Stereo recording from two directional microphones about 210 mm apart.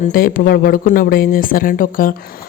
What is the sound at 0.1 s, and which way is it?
A woman's voice, 40° left (ahead or behind).